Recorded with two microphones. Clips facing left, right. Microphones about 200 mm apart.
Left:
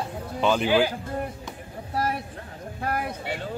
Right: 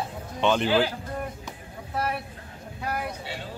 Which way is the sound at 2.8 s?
50° left (ahead or behind).